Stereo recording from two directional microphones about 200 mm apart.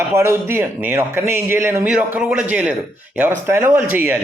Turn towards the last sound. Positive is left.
turn(degrees=-10)  # may be behind; listen again after turning